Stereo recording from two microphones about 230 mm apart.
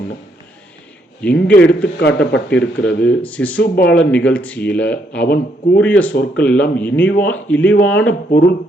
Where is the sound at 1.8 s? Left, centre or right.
Left.